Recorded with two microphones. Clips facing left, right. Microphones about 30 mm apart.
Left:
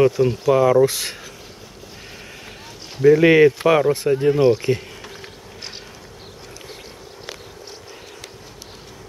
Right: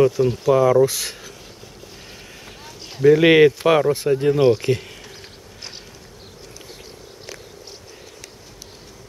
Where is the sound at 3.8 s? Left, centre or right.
Centre.